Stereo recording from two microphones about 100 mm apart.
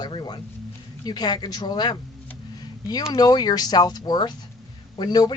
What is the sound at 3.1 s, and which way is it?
Speech, 40° left (ahead or behind).